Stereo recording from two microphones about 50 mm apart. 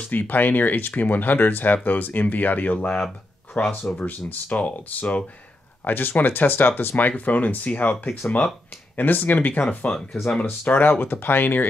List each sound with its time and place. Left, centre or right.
0.1 s speech: left
3.5 s speech: left